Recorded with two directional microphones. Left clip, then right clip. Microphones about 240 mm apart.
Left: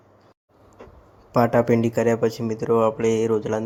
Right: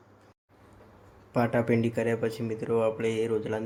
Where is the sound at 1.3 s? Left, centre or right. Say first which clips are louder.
Left 8 dB; centre.